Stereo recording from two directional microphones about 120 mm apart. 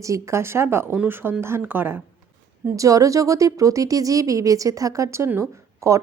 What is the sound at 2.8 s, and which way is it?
A woman's voice, 30° right (ahead or behind).